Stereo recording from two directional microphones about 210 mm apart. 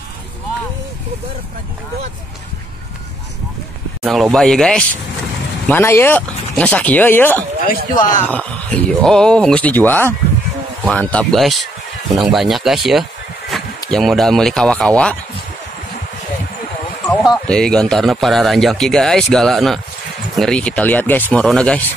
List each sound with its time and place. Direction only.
4.0 s speech: centre (ahead or behind)
7.6 s speech: 40° left (ahead or behind)
8.3 s speech: 5° left (ahead or behind)
17.1 s speech: centre (ahead or behind)